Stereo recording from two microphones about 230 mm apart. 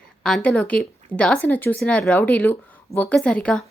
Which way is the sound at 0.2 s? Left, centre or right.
Centre.